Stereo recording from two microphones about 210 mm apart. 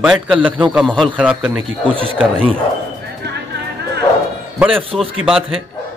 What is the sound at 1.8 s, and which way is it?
Speech, 25° right (ahead or behind).